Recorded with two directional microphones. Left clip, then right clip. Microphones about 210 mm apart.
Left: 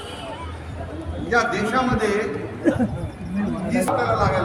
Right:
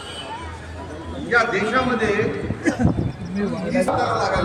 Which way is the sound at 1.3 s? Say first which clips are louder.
Right 2 dB; 55° left (ahead or behind).